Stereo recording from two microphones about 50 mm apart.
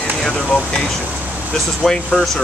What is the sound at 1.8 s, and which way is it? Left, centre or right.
Speech, centre.